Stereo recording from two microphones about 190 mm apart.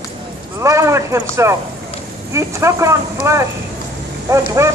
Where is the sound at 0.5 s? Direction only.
15° right (ahead or behind).